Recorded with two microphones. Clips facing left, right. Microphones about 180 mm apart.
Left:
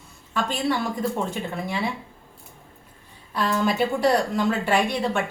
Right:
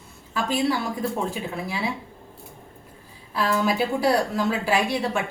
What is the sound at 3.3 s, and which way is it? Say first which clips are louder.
A woman's voice: even; 5° right (ahead or behind).